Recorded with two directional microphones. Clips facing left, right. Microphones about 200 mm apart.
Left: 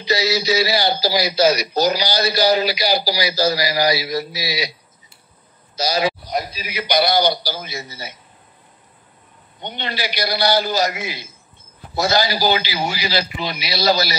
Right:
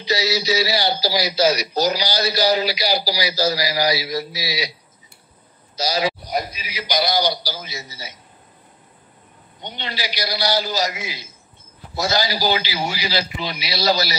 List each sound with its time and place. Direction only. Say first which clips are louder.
0.0 s a man's voice: left 2 dB; 55° left (ahead or behind)
5.8 s a man's voice: left 2 dB; 55° left (ahead or behind)
9.6 s a man's voice: left 3 dB; 55° left (ahead or behind)